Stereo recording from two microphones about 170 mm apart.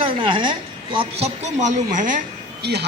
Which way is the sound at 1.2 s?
40° right (ahead or behind).